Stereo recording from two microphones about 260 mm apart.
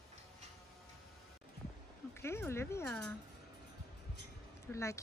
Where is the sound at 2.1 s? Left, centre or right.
Centre.